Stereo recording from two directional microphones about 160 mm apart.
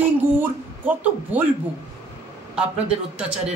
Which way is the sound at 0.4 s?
10° right (ahead or behind).